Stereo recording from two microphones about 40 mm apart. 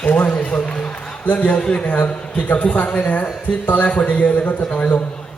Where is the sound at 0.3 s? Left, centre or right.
Left.